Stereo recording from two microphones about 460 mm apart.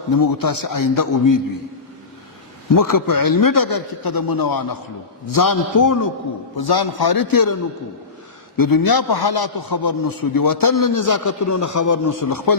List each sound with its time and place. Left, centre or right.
0.1 s a man's voice: left
2.7 s a man's voice: left
6.6 s a man's voice: left
8.5 s a man's voice: left